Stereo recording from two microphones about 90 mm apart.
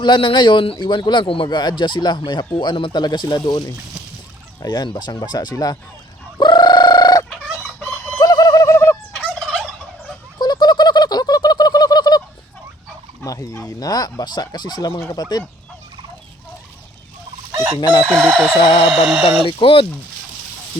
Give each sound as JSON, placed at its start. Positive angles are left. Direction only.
{"t": 0.0, "sound": "speech", "side_deg": 65}
{"t": 0.8, "sound": "speech", "side_deg": 60}
{"t": 1.5, "sound": "speech", "side_deg": 55}
{"t": 4.6, "sound": "speech", "side_deg": 50}
{"t": 6.4, "sound": "fowl", "side_deg": 55}
{"t": 8.2, "sound": "a sound", "side_deg": 45}
{"t": 9.1, "sound": "fowl", "side_deg": 15}
{"t": 10.3, "sound": "bird", "side_deg": 50}
{"t": 13.2, "sound": "speech", "side_deg": 40}
{"t": 17.7, "sound": "speech", "side_deg": 55}
{"t": 18.0, "sound": "chicken", "side_deg": -10}
{"t": 18.6, "sound": "speech", "side_deg": 75}
{"t": 18.9, "sound": "speech", "side_deg": -5}
{"t": 19.5, "sound": "speech", "side_deg": 90}